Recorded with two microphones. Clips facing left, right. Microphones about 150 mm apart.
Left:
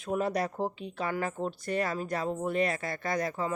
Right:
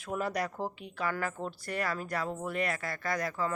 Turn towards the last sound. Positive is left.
turn(degrees=25)  # may be behind; listen again after turning